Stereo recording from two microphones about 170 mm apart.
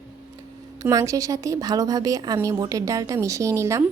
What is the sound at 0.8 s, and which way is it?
A woman's voice, 20° right (ahead or behind).